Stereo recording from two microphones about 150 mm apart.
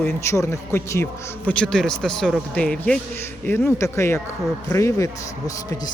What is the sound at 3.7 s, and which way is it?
A man's voice, 20° left (ahead or behind).